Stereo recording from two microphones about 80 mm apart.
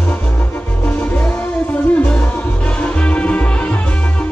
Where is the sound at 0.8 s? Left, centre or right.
Centre.